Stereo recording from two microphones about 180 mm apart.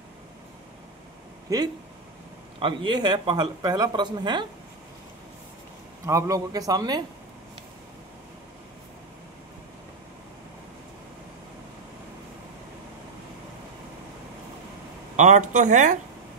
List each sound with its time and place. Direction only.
1.5 s speech: 20° right (ahead or behind)
6.0 s speech: 15° right (ahead or behind)
15.1 s speech: 40° right (ahead or behind)